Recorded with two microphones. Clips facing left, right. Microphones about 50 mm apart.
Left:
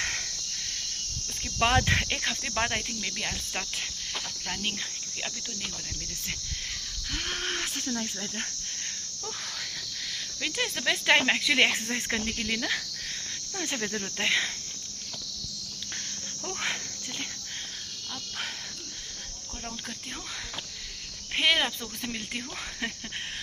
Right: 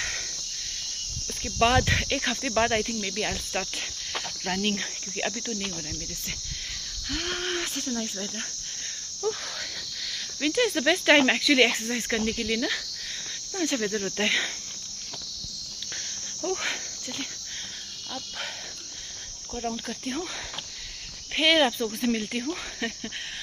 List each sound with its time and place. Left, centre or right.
1.4 s insect: centre
1.6 s cricket: centre
2.1 s cricket: centre
4.1 s cricket: right
7.1 s wheeze: centre
7.8 s cricket: centre
10.4 s cricket: centre
11.4 s cricket: centre
16.4 s insect: centre
19.9 s cricket: centre
21.3 s cricket: centre